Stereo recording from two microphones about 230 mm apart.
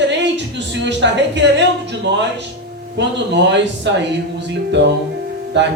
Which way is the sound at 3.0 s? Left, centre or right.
Right.